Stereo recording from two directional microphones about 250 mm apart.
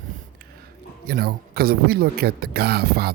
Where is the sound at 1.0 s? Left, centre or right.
Right.